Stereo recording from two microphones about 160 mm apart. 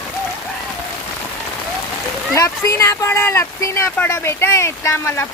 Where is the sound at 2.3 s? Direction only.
20° left (ahead or behind).